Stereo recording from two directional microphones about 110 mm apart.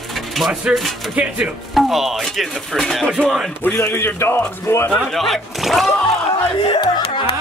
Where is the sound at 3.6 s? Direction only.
20° left (ahead or behind).